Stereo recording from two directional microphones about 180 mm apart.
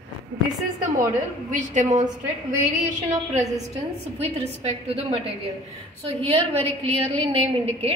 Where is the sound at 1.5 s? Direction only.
45° right (ahead or behind).